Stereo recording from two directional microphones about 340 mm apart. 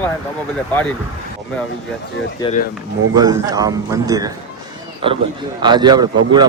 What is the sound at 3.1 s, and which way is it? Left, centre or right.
A man's voice, centre.